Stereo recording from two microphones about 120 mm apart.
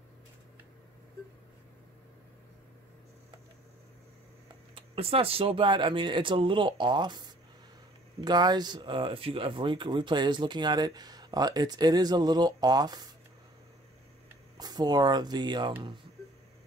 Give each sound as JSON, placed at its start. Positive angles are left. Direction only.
{"t": 4.7, "sound": "speech", "side_deg": -50}
{"t": 14.6, "sound": "speech", "side_deg": -35}